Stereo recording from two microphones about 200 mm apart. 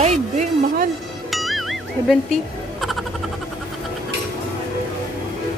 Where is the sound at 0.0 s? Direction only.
35° right (ahead or behind).